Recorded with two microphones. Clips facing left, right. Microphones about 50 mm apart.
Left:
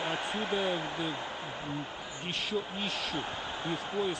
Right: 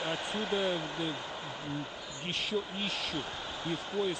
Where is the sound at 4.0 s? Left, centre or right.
Left.